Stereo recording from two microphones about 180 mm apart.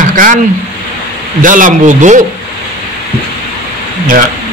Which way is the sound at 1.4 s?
45° right (ahead or behind).